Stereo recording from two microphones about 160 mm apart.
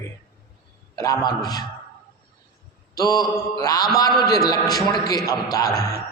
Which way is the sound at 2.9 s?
25° left (ahead or behind).